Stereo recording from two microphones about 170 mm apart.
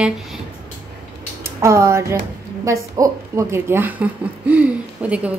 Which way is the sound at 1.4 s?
15° right (ahead or behind).